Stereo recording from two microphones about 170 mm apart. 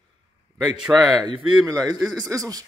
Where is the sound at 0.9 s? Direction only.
Centre (ahead or behind).